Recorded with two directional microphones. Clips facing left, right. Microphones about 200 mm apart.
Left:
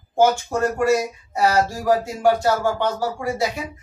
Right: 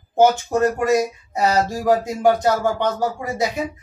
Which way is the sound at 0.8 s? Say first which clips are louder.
Right 1 dB; 20° right (ahead or behind).